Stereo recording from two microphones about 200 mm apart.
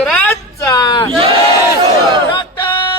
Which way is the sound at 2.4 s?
25° left (ahead or behind).